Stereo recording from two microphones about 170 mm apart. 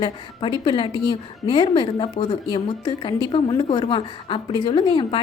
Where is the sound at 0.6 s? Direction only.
30° left (ahead or behind).